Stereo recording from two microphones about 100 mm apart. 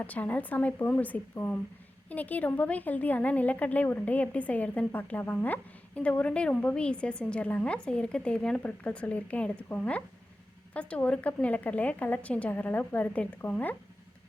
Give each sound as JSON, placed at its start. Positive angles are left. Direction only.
{"t": 0.0, "sound": "a woman's voice", "side_deg": 15}